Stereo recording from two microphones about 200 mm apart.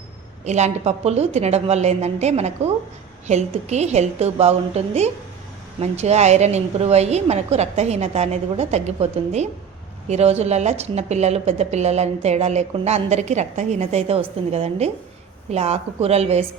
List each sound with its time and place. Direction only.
0.4 s a woman's voice: 35° right (ahead or behind)